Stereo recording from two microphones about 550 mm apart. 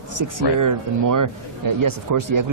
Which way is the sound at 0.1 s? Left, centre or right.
Right.